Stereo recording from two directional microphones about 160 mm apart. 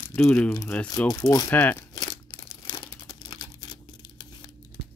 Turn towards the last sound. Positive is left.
turn(degrees=30)  # may be behind; listen again after turning